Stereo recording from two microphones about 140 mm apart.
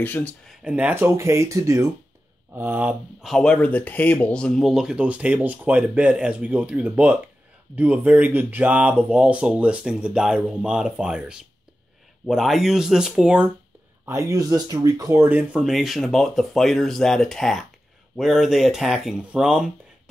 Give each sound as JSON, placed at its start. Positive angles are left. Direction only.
{"t": 0.0, "sound": "speech", "side_deg": 10}
{"t": 0.5, "sound": "speech", "side_deg": -5}
{"t": 3.3, "sound": "speech", "side_deg": 5}
{"t": 14.0, "sound": "speech", "side_deg": -20}